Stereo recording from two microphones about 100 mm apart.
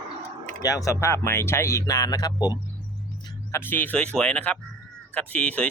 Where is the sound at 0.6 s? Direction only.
35° left (ahead or behind).